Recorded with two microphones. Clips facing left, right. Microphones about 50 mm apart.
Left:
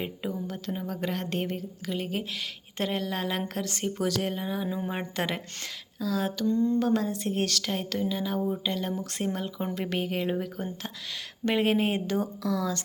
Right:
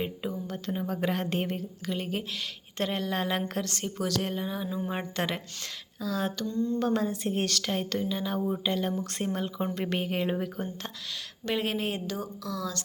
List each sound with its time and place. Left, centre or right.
0.0 s a woman's voice: centre
3.7 s a woman's voice: centre
6.4 s a sound: left
6.7 s a woman's voice: centre
11.4 s a woman's voice: centre